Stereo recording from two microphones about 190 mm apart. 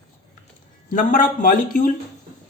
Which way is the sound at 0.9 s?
45° left (ahead or behind).